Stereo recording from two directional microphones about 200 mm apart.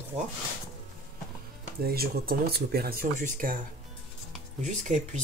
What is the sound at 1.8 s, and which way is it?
Speech, 50° right (ahead or behind).